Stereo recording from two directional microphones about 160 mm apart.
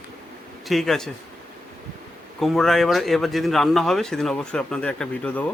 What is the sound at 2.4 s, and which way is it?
Speech, centre (ahead or behind).